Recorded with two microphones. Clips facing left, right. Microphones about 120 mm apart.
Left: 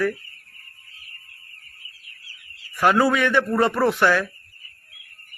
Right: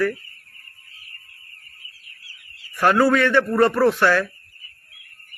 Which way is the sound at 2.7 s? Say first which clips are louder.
Right 2 dB; 10° left (ahead or behind).